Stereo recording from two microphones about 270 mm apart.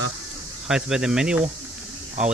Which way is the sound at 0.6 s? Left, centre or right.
Centre.